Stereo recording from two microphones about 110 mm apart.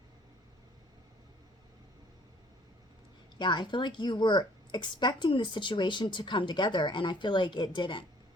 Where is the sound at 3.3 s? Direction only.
40° left (ahead or behind).